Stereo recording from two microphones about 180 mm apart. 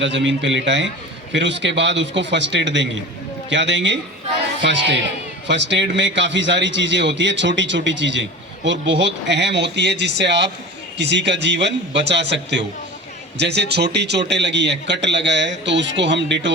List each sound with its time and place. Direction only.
0.0 s a man's voice: 90° right